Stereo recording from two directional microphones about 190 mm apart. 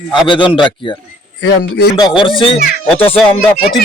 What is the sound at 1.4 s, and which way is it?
Speech, 65° left (ahead or behind).